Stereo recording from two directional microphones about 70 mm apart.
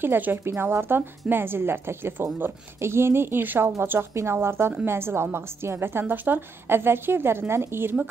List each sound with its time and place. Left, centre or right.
0.0 s a woman's voice: right